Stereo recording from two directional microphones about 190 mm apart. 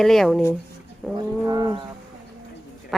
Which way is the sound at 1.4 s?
20° right (ahead or behind).